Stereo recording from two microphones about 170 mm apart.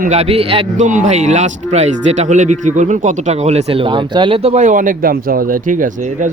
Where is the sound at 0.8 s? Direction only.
45° right (ahead or behind).